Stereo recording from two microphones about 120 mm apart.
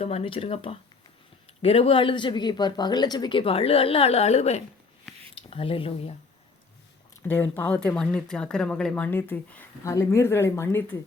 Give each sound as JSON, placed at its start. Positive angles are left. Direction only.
{"t": 0.0, "sound": "speech", "side_deg": 55}
{"t": 7.2, "sound": "speech", "side_deg": 15}